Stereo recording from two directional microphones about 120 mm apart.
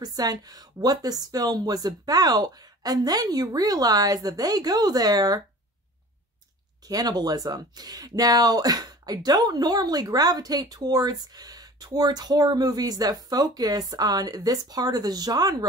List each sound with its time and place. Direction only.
0.0 s speech: 35° right (ahead or behind)
6.9 s speech: 35° right (ahead or behind)